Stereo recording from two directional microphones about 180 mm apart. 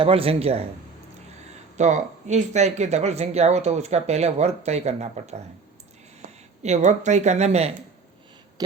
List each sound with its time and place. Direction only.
0.0 s speech: 30° right (ahead or behind)
1.7 s speech: 40° right (ahead or behind)
6.6 s speech: 40° right (ahead or behind)